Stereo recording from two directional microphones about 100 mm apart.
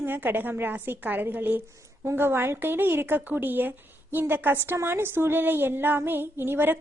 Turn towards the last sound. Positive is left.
turn(degrees=-20)  # may be behind; listen again after turning